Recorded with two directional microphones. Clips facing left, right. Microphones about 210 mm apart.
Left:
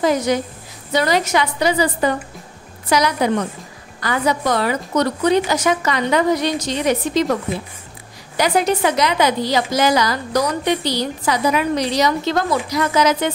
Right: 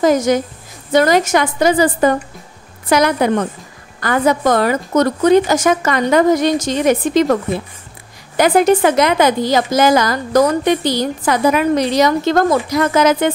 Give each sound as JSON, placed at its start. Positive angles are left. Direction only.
{"t": 0.0, "sound": "a woman's voice", "side_deg": -45}
{"t": 8.4, "sound": "a woman's voice", "side_deg": -50}